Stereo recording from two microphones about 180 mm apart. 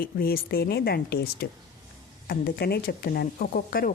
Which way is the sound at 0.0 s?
55° left (ahead or behind).